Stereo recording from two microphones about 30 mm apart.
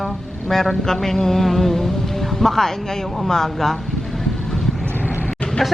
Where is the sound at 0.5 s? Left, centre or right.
Centre.